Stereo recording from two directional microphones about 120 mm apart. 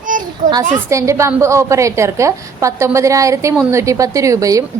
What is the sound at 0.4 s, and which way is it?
Speech, 90° right.